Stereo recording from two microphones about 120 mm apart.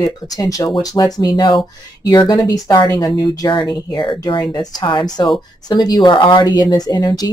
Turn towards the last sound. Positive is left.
turn(degrees=35)  # may be behind; listen again after turning